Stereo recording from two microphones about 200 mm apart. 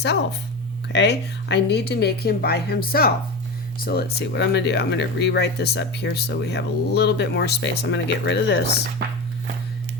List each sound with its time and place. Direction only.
0.9 s speech: 55° left (ahead or behind)